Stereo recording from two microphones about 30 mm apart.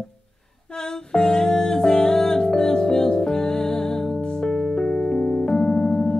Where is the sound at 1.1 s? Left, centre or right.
Left.